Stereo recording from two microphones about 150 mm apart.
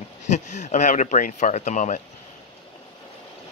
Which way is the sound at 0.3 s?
50° left (ahead or behind).